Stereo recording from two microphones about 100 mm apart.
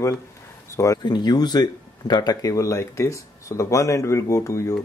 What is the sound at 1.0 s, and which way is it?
Speech, 45° left (ahead or behind).